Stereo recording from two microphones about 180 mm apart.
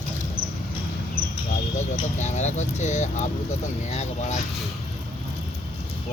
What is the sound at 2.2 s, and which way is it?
Speech, 40° left (ahead or behind).